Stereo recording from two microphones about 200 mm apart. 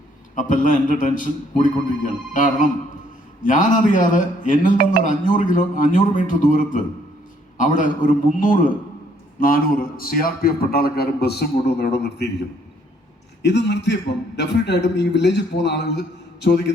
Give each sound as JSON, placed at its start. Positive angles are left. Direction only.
{"t": 0.3, "sound": "a man's voice", "side_deg": 40}
{"t": 13.4, "sound": "a man's voice", "side_deg": 60}